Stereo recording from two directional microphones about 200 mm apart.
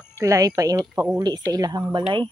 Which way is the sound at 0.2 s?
15° right (ahead or behind).